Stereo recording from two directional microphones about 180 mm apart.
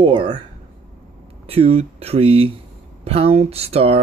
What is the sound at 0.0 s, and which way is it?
Speech, 30° right (ahead or behind).